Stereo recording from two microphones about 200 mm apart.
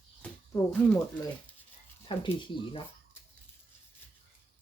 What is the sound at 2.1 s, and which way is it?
Speech, 25° left (ahead or behind).